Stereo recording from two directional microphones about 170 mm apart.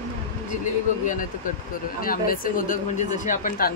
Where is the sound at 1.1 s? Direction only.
50° left (ahead or behind).